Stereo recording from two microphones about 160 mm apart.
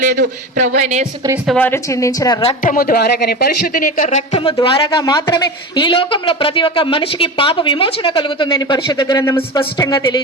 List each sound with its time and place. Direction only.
0.0 s a sound: 55° right (ahead or behind)
1.5 s speech: 15° left (ahead or behind)
2.6 s speech: 65° left (ahead or behind); by 4.4 s 50° left (ahead or behind)
4.6 s speech: 30° left (ahead or behind)